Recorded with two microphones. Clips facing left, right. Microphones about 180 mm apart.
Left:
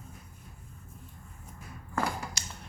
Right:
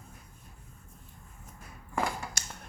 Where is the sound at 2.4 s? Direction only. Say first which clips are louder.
Even; 50° right (ahead or behind).